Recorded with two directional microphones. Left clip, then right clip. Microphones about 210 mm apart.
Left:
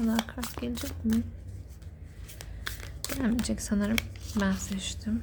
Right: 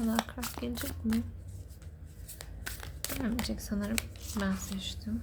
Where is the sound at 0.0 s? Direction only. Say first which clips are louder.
Left 2 dB; 5° left (ahead or behind).